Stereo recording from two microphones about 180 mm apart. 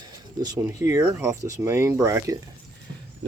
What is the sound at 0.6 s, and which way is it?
Speech, 15° right (ahead or behind).